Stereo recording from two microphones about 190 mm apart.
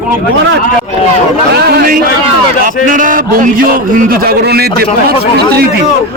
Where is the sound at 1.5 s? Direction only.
55° right (ahead or behind).